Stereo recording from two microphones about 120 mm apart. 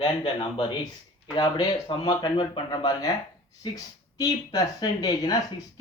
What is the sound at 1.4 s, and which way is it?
Speech, 35° left (ahead or behind).